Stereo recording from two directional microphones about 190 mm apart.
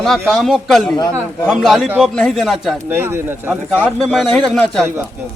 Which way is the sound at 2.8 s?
10° right (ahead or behind).